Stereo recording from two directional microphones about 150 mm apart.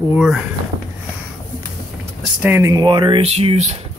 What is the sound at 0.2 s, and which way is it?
Speech, 5° right (ahead or behind).